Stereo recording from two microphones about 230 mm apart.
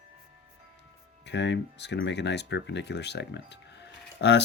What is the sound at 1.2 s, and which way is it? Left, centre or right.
Speech, left.